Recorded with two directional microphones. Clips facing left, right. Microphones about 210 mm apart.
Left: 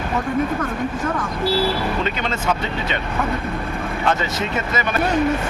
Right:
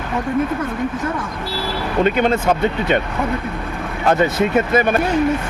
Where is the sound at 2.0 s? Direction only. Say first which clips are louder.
Right 7 dB; 50° right (ahead or behind).